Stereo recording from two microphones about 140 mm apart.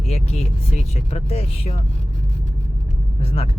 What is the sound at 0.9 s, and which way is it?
Speech, 45° left (ahead or behind).